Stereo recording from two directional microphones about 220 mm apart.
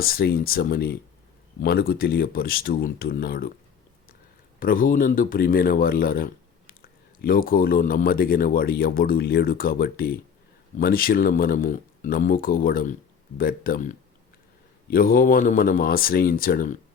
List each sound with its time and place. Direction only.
0.0 s speech: 45° left (ahead or behind)
4.6 s speech: 40° left (ahead or behind)